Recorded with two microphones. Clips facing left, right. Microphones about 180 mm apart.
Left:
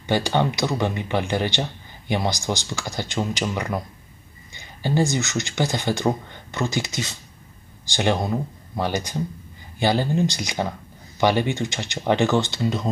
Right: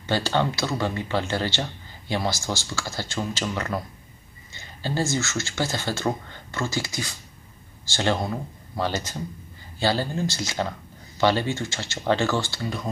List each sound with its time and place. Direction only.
0.0 s speech: 15° left (ahead or behind)